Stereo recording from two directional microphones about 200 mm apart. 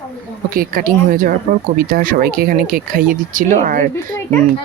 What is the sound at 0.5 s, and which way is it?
Speech, 45° right (ahead or behind).